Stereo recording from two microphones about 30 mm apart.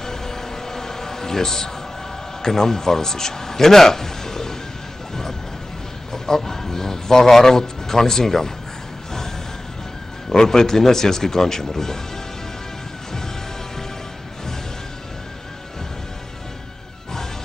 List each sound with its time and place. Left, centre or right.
0.0 s a sound: centre
2.4 s speech: centre
6.1 s a man's voice: centre
10.3 s speech: centre